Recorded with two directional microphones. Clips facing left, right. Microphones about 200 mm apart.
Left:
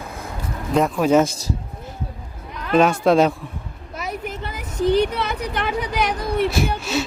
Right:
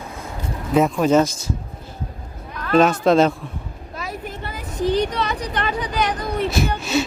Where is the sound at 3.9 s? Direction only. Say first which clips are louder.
Left 2 dB; 20° left (ahead or behind).